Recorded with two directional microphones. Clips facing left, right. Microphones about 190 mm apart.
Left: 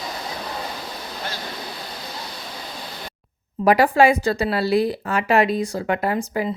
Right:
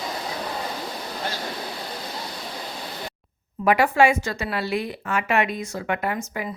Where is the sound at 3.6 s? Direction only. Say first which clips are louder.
Left 3 dB; 35° left (ahead or behind).